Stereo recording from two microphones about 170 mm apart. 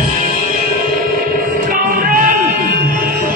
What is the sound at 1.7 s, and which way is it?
Music, 55° right (ahead or behind).